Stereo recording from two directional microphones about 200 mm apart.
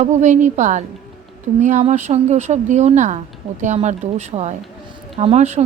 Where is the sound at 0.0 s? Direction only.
35° right (ahead or behind).